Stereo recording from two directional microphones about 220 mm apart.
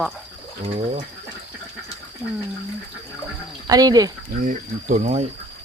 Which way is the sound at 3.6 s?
15° right (ahead or behind).